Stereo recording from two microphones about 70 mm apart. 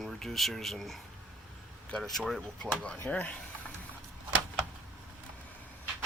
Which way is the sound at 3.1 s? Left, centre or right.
Centre.